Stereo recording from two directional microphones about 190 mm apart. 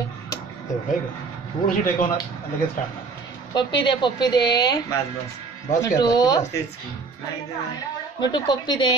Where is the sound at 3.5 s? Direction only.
25° left (ahead or behind).